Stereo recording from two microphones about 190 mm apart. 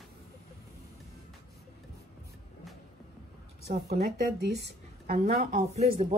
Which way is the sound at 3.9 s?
55° right (ahead or behind).